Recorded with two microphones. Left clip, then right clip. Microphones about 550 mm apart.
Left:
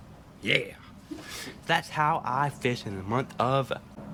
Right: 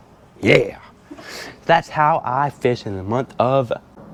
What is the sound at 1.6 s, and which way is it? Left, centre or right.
Speech, right.